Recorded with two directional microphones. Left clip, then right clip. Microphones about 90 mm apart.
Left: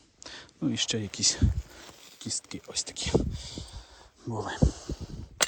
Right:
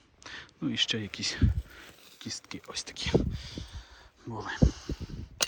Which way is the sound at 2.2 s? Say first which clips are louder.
Left 3 dB; 40° left (ahead or behind).